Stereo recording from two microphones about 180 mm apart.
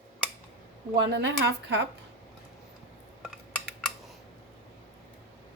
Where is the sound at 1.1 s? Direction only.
70° right (ahead or behind).